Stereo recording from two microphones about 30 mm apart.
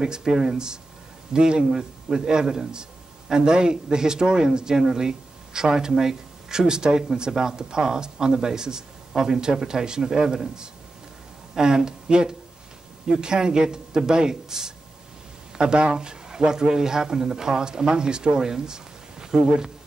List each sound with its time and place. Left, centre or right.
0.0 s a man's voice: right
15.5 s a man's voice: right